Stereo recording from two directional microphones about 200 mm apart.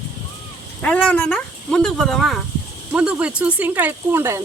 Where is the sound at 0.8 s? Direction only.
5° left (ahead or behind); by 4.4 s 10° right (ahead or behind).